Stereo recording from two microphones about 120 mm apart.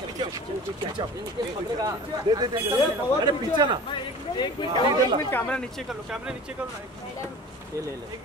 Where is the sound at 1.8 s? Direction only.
35° right (ahead or behind).